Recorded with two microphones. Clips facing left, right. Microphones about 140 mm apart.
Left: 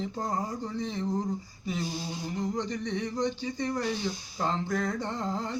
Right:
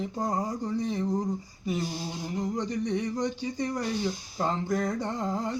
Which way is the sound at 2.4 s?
10° right (ahead or behind).